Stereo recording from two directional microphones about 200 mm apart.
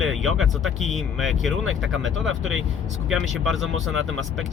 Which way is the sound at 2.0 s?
75° right (ahead or behind).